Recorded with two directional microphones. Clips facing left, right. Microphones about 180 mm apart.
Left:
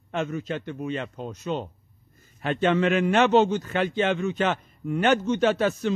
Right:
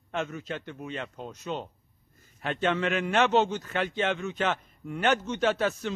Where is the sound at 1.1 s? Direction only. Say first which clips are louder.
Left 5 dB; 35° left (ahead or behind).